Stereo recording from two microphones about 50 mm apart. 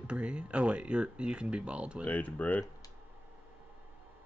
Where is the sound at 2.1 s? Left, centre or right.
Left.